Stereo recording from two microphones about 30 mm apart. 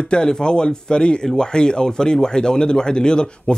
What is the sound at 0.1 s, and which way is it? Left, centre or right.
A man's voice, left.